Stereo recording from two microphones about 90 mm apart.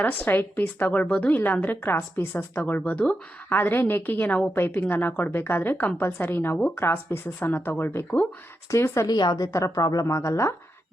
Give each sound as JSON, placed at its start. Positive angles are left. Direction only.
{"t": 0.0, "sound": "a woman's voice", "side_deg": 20}
{"t": 8.7, "sound": "speech", "side_deg": 30}
{"t": 9.0, "sound": "a woman's voice", "side_deg": 45}
{"t": 9.5, "sound": "speech", "side_deg": 35}